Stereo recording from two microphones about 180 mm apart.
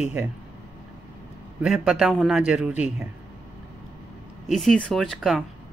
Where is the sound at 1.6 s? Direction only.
Centre (ahead or behind).